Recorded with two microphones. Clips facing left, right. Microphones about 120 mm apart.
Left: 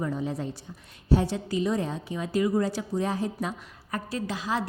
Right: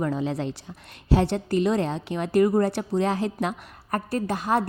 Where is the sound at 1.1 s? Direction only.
70° right (ahead or behind).